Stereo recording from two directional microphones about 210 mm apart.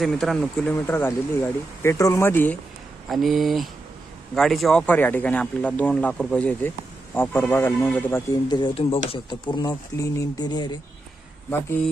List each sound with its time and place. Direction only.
0.0 s speech: centre (ahead or behind)
8.4 s speech: 20° left (ahead or behind)